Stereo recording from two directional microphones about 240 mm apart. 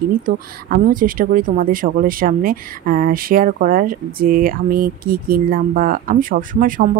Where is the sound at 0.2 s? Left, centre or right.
Right.